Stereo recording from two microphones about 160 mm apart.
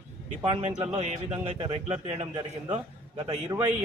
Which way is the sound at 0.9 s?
45° right (ahead or behind).